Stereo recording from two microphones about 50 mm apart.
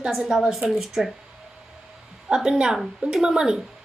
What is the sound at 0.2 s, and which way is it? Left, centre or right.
Speech, centre.